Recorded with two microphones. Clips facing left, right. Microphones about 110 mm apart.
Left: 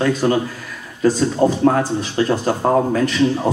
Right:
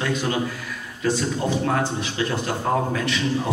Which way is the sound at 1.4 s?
35° left (ahead or behind).